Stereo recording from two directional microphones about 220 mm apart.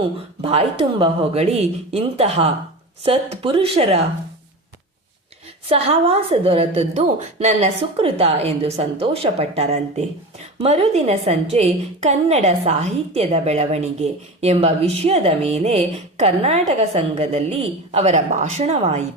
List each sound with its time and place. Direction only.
0.4 s a woman's voice: 25° right (ahead or behind)
5.6 s a woman's voice: 25° right (ahead or behind)